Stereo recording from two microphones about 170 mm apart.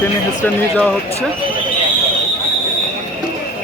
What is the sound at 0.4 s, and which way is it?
Speech, 5° left (ahead or behind).